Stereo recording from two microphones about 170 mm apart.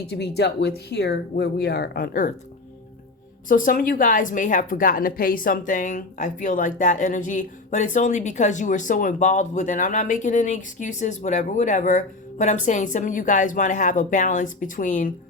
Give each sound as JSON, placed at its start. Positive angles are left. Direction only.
{"t": 0.1, "sound": "a woman's voice", "side_deg": 75}
{"t": 3.5, "sound": "a woman's voice", "side_deg": 55}